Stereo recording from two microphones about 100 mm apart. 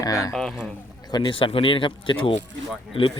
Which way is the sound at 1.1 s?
55° left (ahead or behind).